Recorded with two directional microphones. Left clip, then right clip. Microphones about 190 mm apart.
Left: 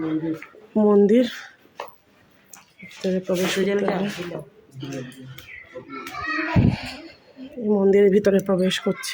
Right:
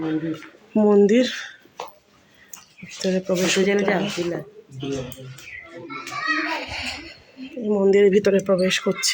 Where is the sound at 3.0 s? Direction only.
5° right (ahead or behind).